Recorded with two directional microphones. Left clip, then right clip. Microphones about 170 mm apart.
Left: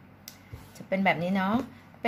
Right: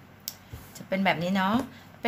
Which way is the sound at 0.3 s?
20° left (ahead or behind).